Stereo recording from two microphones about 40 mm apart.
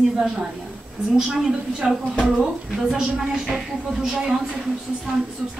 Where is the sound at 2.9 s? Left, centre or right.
Centre.